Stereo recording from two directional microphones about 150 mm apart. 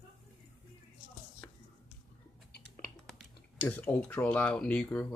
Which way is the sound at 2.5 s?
70° left (ahead or behind).